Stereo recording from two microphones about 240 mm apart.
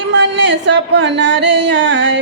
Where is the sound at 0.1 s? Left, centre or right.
Right.